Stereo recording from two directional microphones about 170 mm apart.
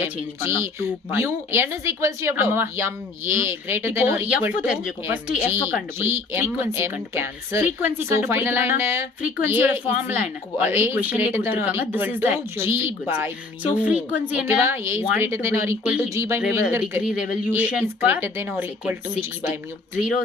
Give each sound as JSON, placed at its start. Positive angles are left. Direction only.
{"t": 0.0, "sound": "speech", "side_deg": -15}
{"t": 16.0, "sound": "speech", "side_deg": -15}